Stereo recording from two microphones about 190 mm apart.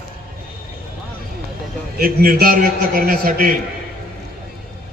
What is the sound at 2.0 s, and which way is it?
A man's voice, 50° right (ahead or behind).